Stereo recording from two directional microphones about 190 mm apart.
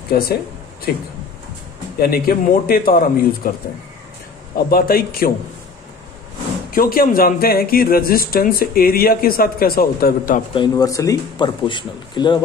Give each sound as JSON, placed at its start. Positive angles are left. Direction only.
{"t": 0.1, "sound": "speech", "side_deg": 55}
{"t": 4.6, "sound": "speech", "side_deg": 50}
{"t": 6.7, "sound": "speech", "side_deg": 50}
{"t": 10.5, "sound": "speech", "side_deg": 20}